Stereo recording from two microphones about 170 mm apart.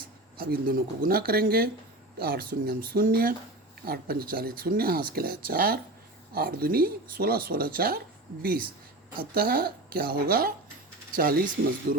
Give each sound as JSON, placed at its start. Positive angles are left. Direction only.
{"t": 0.3, "sound": "speech", "side_deg": -65}